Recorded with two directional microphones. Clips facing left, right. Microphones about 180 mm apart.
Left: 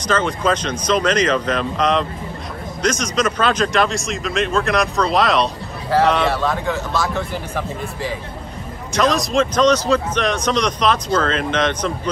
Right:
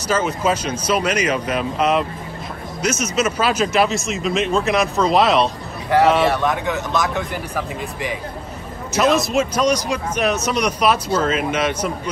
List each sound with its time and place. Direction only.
0.0 s speech: 5° right (ahead or behind)
6.3 s speech: 20° right (ahead or behind)
8.9 s speech: 5° right (ahead or behind)